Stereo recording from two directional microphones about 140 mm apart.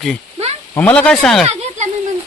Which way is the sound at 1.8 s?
60° right (ahead or behind).